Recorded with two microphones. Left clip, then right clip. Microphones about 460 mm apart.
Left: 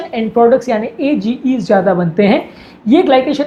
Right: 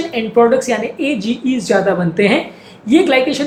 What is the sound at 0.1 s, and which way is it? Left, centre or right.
Speech, left.